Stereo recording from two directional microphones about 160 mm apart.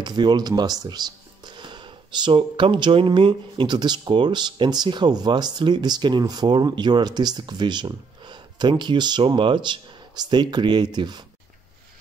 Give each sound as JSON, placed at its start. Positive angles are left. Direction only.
{"t": 0.0, "sound": "speech", "side_deg": -25}